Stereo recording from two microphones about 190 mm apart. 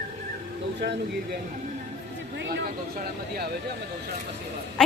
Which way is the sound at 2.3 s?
55° right (ahead or behind).